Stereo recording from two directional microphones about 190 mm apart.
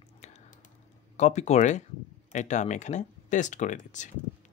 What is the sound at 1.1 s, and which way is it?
Speech, 35° left (ahead or behind).